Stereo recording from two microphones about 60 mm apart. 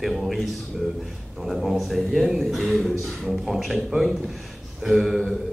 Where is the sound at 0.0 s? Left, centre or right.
Centre.